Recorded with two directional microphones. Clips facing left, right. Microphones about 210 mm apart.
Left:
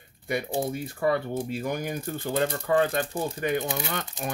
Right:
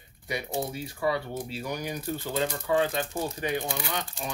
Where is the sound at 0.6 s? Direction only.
50° left (ahead or behind).